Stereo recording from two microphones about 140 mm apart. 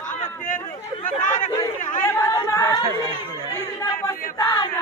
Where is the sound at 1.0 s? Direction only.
65° left (ahead or behind).